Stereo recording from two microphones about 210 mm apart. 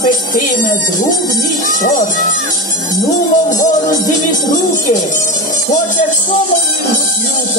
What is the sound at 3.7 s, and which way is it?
Music, 40° left (ahead or behind).